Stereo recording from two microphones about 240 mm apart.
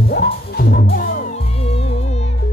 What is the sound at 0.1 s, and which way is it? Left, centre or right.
Music, left.